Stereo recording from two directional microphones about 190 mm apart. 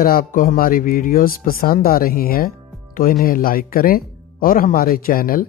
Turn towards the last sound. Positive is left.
turn(degrees=50)  # may be behind; listen again after turning